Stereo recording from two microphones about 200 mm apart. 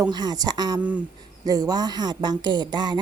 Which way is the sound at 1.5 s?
20° right (ahead or behind).